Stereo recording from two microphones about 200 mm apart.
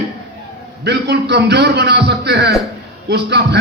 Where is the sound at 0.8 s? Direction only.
55° right (ahead or behind).